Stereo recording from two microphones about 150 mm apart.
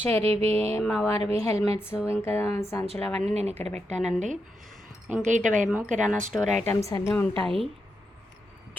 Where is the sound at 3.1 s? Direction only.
45° right (ahead or behind).